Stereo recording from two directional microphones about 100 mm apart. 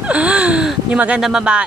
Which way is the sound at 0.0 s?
10° right (ahead or behind).